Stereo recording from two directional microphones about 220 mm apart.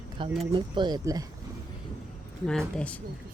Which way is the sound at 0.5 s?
20° right (ahead or behind).